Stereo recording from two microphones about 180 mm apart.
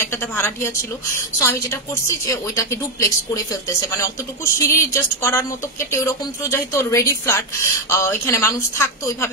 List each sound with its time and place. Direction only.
0.0 s a woman's voice: 15° left (ahead or behind)